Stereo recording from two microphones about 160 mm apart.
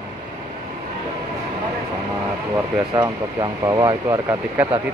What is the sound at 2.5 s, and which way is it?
Speech, 20° right (ahead or behind).